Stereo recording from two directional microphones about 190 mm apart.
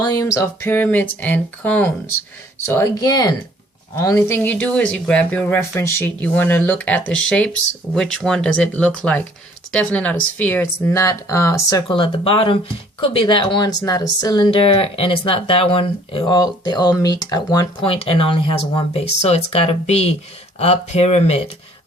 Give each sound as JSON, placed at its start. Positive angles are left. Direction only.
{"t": 0.0, "sound": "speech", "side_deg": 20}
{"t": 2.7, "sound": "speech", "side_deg": 20}